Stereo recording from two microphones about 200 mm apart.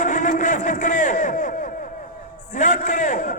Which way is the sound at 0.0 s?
40° left (ahead or behind).